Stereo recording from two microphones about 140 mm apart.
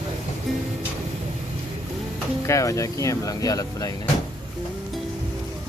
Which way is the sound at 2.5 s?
20° left (ahead or behind).